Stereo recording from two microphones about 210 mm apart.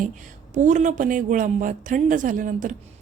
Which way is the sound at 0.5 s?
35° right (ahead or behind).